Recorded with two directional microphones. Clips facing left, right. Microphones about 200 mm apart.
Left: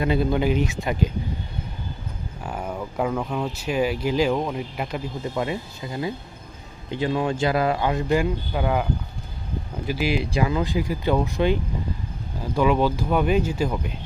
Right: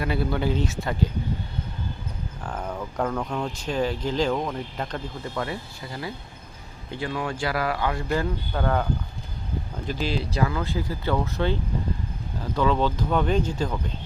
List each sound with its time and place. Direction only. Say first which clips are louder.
0.0 s speech: left 4 dB; 20° left (ahead or behind)
2.4 s speech: left 2 dB; 10° left (ahead or behind)
12.5 s speech: left 3 dB; 10° left (ahead or behind)